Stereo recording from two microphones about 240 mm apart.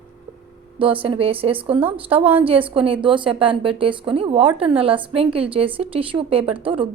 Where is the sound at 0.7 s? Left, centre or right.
Right.